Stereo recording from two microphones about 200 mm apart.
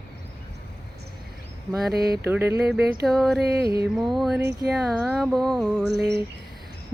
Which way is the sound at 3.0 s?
Centre (ahead or behind).